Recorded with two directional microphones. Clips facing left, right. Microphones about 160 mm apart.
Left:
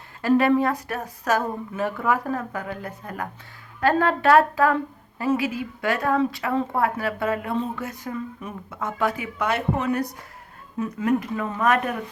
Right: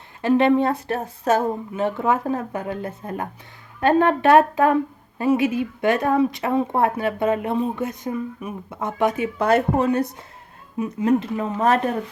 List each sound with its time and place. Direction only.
0.2 s speech: 25° right (ahead or behind)
9.5 s speech: 40° right (ahead or behind)